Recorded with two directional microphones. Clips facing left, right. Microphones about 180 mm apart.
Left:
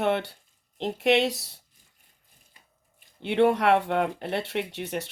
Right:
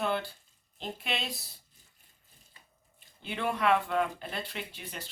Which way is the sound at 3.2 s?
75° left (ahead or behind).